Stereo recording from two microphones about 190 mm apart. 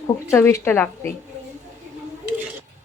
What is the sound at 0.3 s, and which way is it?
Speech, 15° left (ahead or behind).